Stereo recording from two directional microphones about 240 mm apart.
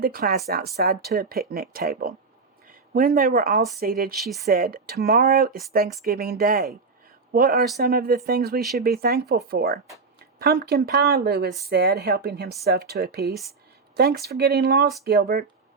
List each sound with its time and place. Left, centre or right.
0.0 s speech: right
4.1 s a woman's voice: centre
4.4 s speech: right